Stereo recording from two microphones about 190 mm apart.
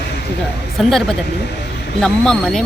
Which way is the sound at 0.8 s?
Centre (ahead or behind).